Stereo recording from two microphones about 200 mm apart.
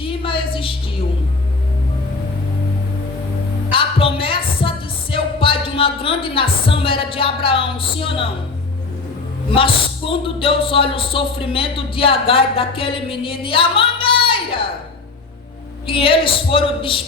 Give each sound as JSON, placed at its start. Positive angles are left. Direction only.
{"t": 0.0, "sound": "a sound", "side_deg": 25}
{"t": 3.7, "sound": "music", "side_deg": 25}
{"t": 9.6, "sound": "speech", "side_deg": 25}
{"t": 15.9, "sound": "speech", "side_deg": 25}